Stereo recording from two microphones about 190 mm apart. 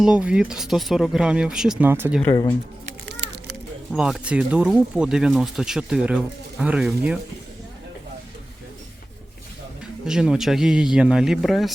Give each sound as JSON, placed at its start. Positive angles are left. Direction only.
{"t": 0.0, "sound": "speech", "side_deg": -5}
{"t": 2.2, "sound": "speech", "side_deg": 20}
{"t": 3.9, "sound": "speech", "side_deg": -5}
{"t": 10.1, "sound": "speech", "side_deg": -5}